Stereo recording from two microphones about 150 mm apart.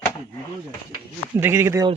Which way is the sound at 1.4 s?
15° right (ahead or behind).